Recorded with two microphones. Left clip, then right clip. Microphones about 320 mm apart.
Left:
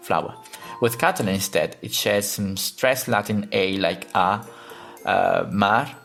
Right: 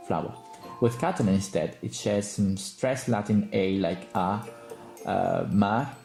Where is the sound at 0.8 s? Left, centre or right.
Left.